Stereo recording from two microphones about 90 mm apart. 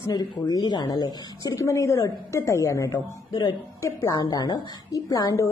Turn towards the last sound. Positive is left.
turn(degrees=40)  # may be behind; listen again after turning